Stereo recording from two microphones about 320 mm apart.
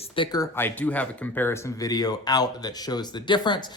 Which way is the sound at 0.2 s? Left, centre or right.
Centre.